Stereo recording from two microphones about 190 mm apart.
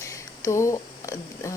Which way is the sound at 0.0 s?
15° left (ahead or behind).